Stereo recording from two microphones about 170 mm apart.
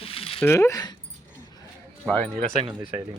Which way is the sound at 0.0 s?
35° left (ahead or behind).